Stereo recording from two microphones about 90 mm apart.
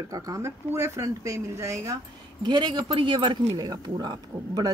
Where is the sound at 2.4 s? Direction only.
55° right (ahead or behind).